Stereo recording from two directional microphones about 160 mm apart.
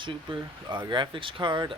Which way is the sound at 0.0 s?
30° right (ahead or behind).